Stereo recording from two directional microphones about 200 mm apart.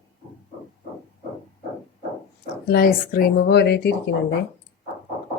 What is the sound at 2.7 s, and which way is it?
Speech, 50° left (ahead or behind).